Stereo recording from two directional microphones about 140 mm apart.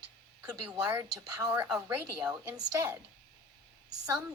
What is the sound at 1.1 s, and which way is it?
Speech, 25° right (ahead or behind).